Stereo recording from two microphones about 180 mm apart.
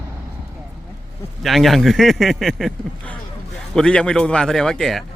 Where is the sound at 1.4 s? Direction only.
Centre (ahead or behind).